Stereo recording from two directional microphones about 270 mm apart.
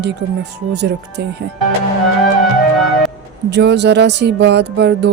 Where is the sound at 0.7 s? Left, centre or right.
Right.